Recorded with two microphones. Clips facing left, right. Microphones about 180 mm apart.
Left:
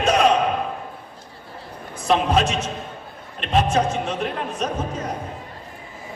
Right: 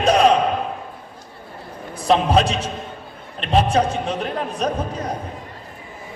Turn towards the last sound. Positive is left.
turn(degrees=-35)  # may be behind; listen again after turning